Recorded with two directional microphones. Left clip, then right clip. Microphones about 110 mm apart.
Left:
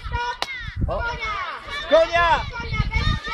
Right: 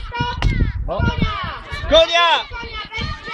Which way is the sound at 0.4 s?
30° right (ahead or behind).